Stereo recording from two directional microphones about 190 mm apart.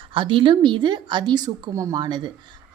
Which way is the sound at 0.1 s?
25° right (ahead or behind).